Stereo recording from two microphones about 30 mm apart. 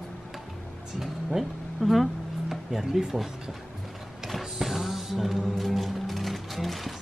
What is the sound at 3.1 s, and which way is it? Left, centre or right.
Speech, centre.